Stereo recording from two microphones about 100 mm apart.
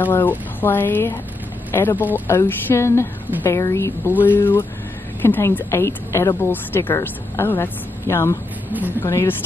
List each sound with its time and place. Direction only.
0.0 s a woman's voice: 20° left (ahead or behind)